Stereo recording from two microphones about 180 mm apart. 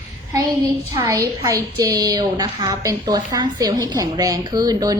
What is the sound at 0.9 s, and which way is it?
A woman's voice, 15° right (ahead or behind).